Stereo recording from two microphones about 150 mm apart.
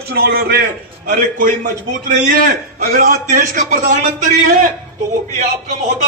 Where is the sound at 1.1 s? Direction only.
60° right (ahead or behind).